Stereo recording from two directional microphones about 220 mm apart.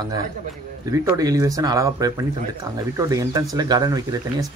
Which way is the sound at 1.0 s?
15° right (ahead or behind).